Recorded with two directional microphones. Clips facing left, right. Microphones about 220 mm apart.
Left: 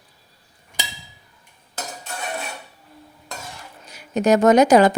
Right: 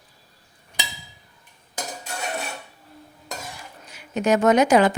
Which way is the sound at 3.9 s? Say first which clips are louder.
Left 3 dB; 40° left (ahead or behind).